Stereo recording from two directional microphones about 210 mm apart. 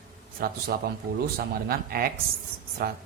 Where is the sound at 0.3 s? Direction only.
45° right (ahead or behind).